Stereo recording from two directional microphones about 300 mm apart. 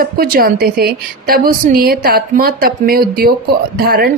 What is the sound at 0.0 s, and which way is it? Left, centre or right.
A woman's voice, right.